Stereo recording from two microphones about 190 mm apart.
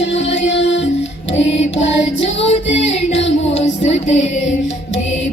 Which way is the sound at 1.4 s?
35° left (ahead or behind).